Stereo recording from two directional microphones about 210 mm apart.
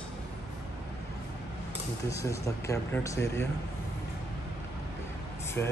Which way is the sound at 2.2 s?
15° left (ahead or behind).